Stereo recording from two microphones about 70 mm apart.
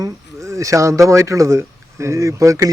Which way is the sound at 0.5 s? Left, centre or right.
Right.